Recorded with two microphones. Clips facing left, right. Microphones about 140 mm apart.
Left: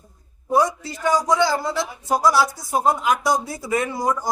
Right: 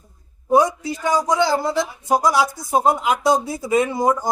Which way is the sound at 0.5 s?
15° right (ahead or behind).